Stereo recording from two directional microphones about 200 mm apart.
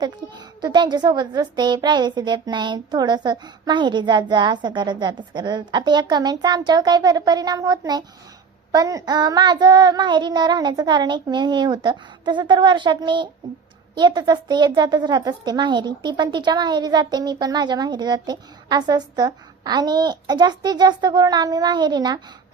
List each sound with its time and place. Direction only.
0.0 s speech: 20° right (ahead or behind)